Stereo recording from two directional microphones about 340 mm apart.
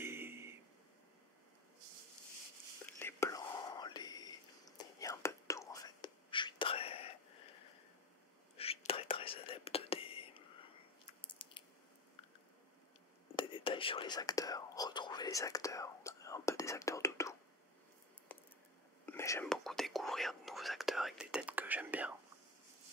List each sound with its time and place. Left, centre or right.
0.0 s a sound: centre
3.0 s whispering: centre
8.5 s whispering: centre
11.1 s biting: centre
13.4 s whispering: centre
18.3 s squish: centre
19.0 s whispering: centre